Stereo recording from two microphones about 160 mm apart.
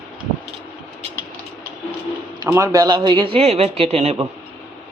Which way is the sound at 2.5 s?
15° right (ahead or behind).